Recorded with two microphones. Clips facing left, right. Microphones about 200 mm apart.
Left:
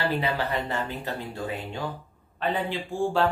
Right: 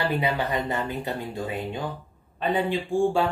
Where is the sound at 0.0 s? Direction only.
15° right (ahead or behind).